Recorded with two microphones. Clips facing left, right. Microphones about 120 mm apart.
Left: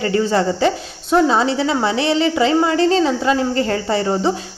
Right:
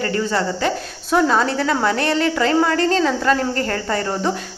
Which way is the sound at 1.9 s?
50° right (ahead or behind).